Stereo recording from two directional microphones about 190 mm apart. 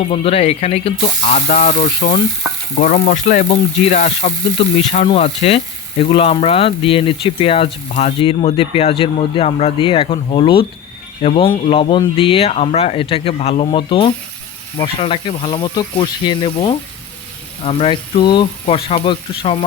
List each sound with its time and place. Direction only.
0.1 s speech: 30° left (ahead or behind)